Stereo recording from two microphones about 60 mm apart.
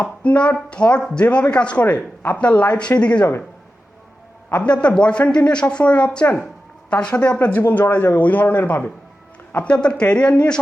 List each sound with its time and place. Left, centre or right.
0.0 s a woman's voice: left
4.5 s a woman's voice: centre
9.6 s speech: centre